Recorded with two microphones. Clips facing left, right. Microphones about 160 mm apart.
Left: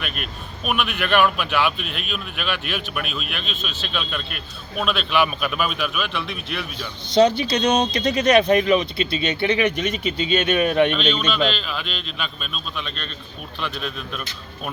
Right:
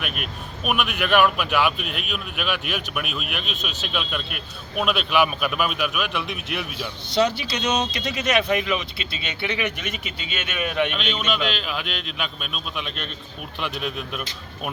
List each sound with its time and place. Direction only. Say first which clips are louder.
0.0 s a man's voice: even; 5° right (ahead or behind)
7.5 s speech: left 5 dB; 40° left (ahead or behind)
10.9 s a man's voice: left 4 dB; 10° right (ahead or behind)